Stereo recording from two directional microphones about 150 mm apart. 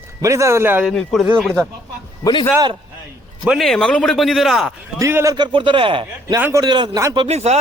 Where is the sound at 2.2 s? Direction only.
30° left (ahead or behind).